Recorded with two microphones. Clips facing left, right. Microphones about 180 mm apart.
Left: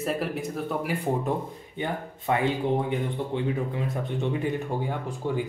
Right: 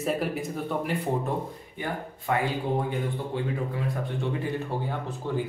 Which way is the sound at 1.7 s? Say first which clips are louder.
Left 2 dB; 20° left (ahead or behind).